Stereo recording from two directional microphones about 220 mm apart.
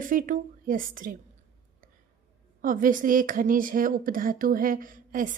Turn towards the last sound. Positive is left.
turn(degrees=-35)  # may be behind; listen again after turning